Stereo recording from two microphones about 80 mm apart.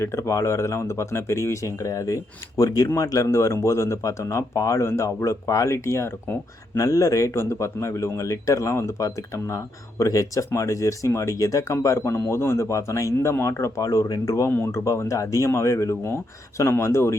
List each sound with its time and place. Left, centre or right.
0.0 s speech: left
6.7 s speech: left
14.5 s speech: left